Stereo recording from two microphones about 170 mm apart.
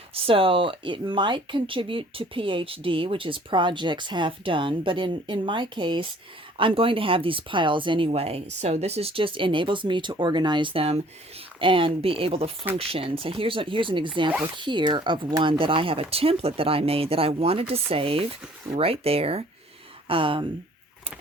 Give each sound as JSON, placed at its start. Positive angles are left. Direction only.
{"t": 0.1, "sound": "speech", "side_deg": -35}